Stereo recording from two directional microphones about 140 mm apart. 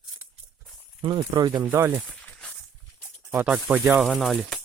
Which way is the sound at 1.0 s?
35° right (ahead or behind).